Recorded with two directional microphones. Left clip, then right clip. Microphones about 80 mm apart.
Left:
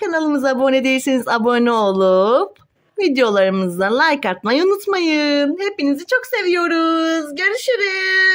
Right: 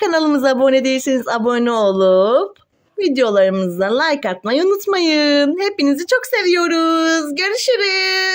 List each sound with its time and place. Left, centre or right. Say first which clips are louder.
0.0 s speech: right 3 dB; centre
0.4 s speech: right 2 dB; centre
0.8 s speech: even; centre
4.9 s speech: right 2 dB; centre; by 8.3 s right